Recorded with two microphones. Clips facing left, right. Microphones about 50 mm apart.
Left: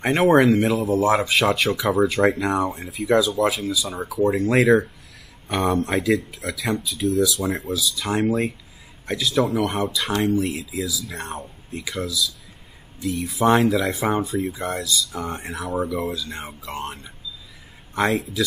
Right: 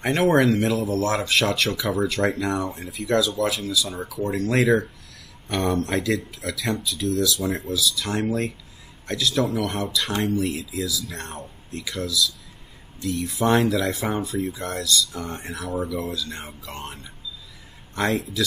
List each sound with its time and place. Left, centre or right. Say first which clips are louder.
0.0 s speech: left 3 dB; centre
4.6 s speech: left 2 dB; centre
7.3 s speech: left 1 dB; centre
7.8 s speech: left 3 dB; centre
15.8 s speech: left 3 dB; centre